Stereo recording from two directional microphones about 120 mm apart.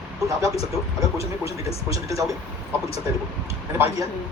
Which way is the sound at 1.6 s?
55° left (ahead or behind).